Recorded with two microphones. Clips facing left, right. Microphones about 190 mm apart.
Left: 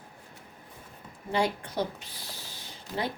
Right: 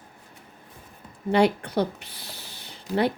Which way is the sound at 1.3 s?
65° right (ahead or behind).